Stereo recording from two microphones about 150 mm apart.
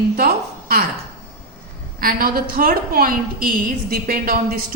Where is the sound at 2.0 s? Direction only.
75° right (ahead or behind).